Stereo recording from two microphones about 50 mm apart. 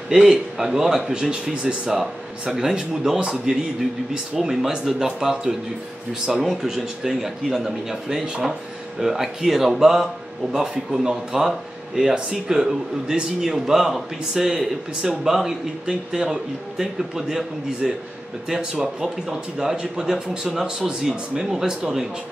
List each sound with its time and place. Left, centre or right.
0.1 s speech: centre